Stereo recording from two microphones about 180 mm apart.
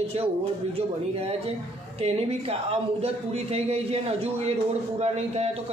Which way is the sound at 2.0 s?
35° right (ahead or behind).